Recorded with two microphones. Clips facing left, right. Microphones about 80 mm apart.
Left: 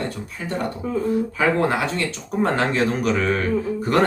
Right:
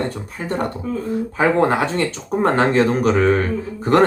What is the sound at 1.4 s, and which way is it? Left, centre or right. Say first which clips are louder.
Speech: right 5 dB; right.